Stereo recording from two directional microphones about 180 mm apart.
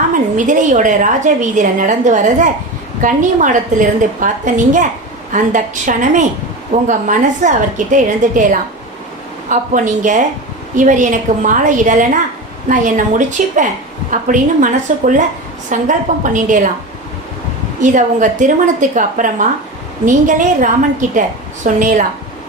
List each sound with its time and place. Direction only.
0.1 s a woman's voice: 45° right (ahead or behind)
17.7 s a woman's voice: 45° right (ahead or behind)